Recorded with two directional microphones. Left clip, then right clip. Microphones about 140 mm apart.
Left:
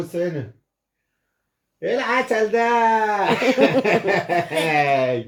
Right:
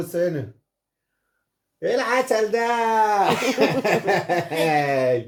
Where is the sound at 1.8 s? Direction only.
25° right (ahead or behind).